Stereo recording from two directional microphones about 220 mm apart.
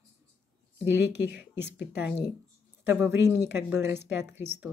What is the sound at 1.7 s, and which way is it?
Speech, 50° left (ahead or behind).